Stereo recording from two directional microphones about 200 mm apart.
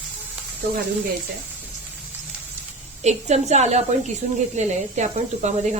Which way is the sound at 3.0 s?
35° right (ahead or behind).